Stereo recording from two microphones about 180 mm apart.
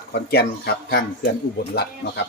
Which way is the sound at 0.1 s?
65° left (ahead or behind).